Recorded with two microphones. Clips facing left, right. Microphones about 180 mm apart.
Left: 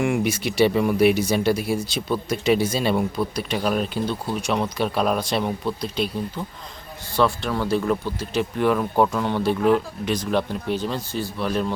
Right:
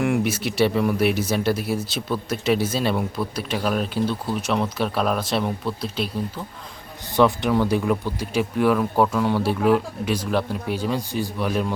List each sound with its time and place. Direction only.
0.0 s speech: centre (ahead or behind)
7.2 s speech: 15° right (ahead or behind)